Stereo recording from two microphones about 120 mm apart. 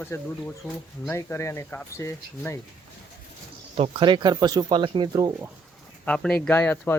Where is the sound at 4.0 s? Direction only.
40° right (ahead or behind).